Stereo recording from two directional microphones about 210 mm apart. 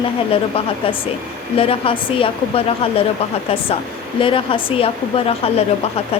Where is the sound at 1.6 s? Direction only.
25° left (ahead or behind).